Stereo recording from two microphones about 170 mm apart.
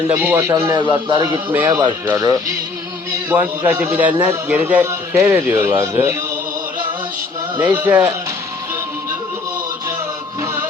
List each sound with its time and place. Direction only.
0.1 s a man's voice: 10° right (ahead or behind)
7.6 s a man's voice: 10° right (ahead or behind)
10.4 s music: 15° right (ahead or behind)